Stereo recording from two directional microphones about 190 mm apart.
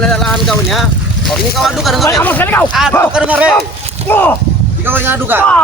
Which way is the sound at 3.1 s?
5° right (ahead or behind).